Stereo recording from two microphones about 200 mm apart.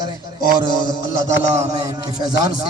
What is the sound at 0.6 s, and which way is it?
A man's voice, 20° right (ahead or behind).